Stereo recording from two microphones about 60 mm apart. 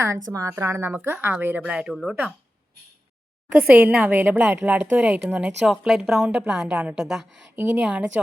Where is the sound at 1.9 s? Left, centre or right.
Centre.